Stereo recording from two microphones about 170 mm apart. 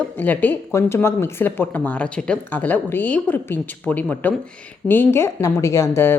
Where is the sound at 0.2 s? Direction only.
10° left (ahead or behind).